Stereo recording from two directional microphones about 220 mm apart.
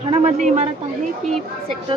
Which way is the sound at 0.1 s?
30° right (ahead or behind).